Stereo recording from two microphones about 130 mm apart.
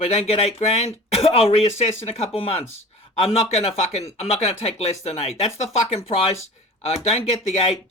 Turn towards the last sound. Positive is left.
turn(degrees=50)  # may be behind; listen again after turning